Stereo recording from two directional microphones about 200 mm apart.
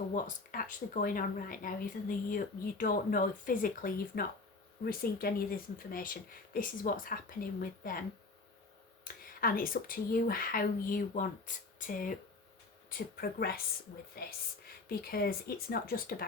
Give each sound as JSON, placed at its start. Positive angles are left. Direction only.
{"t": 0.1, "sound": "speech", "side_deg": 45}
{"t": 9.1, "sound": "a sound", "side_deg": 45}
{"t": 9.4, "sound": "speech", "side_deg": 45}